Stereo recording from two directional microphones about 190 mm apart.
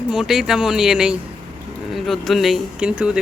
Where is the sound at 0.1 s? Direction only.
Centre (ahead or behind).